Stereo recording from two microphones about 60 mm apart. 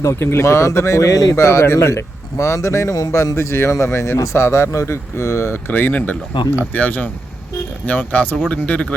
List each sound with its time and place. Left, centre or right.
0.0 s speech: left
1.4 s speech: left
5.7 s speech: left